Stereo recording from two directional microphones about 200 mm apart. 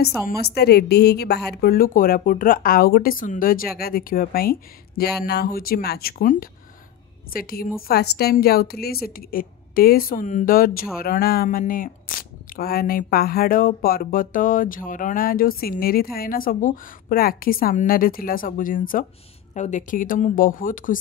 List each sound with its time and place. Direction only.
0.4 s speech: 55° left (ahead or behind)